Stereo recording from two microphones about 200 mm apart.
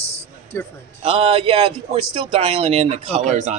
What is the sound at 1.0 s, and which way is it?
Speech, 30° right (ahead or behind).